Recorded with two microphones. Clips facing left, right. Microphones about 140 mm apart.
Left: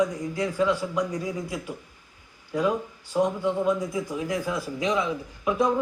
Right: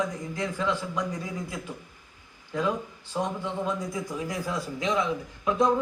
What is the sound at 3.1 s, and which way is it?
A man's voice, 20° left (ahead or behind).